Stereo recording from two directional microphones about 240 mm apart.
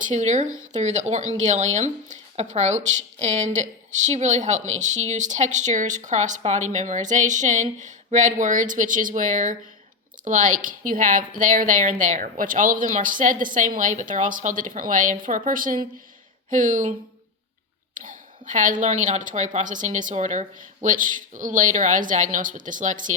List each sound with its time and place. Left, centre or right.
0.0 s a woman's voice: right
17.9 s a sound: right
19.0 s a woman's voice: right